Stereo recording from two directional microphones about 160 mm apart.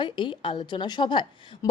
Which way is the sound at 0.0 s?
30° left (ahead or behind).